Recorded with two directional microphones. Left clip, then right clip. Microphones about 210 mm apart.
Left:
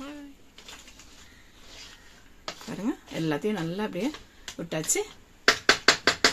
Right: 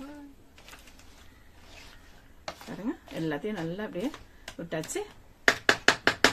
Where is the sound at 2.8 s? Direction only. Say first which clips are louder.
Left 4 dB; 40° left (ahead or behind).